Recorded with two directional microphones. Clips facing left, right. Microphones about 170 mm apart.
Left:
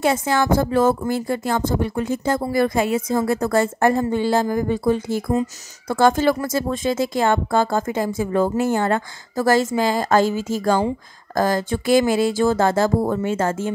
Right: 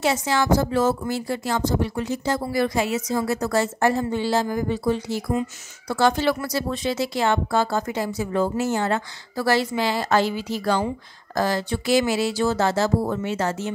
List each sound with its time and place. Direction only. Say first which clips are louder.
0.0 s speech: left 3 dB; 50° left (ahead or behind)